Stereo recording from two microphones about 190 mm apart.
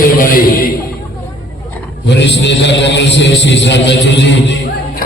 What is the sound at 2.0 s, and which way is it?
A man's voice, 65° left (ahead or behind).